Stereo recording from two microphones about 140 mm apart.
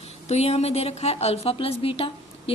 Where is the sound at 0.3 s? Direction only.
50° left (ahead or behind).